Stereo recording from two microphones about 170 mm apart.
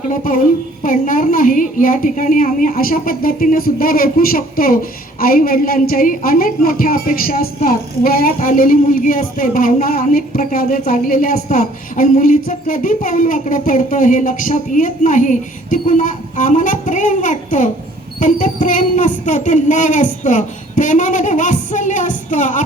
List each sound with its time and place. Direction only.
0.1 s speech: 55° left (ahead or behind)